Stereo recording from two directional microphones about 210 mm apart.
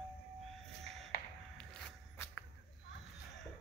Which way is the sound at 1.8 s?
Centre (ahead or behind).